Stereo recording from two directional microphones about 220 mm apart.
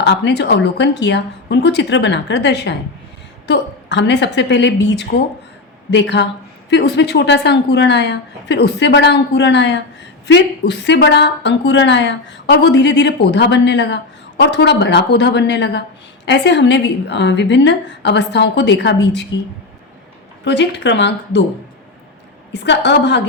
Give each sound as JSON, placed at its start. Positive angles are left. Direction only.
{"t": 0.0, "sound": "a woman's voice", "side_deg": 50}
{"t": 20.4, "sound": "a woman's voice", "side_deg": 50}
{"t": 22.5, "sound": "a woman's voice", "side_deg": 50}